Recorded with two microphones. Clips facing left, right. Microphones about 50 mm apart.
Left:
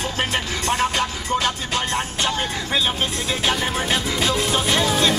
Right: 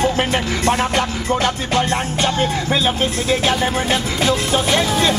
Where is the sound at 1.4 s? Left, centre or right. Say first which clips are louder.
Right 5 dB; right.